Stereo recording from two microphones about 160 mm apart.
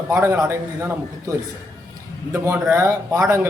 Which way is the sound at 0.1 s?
15° right (ahead or behind).